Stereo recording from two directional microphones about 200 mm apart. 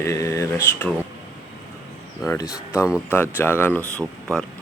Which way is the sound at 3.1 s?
10° left (ahead or behind).